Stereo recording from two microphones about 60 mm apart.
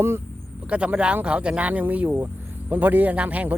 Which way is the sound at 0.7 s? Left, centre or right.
Centre.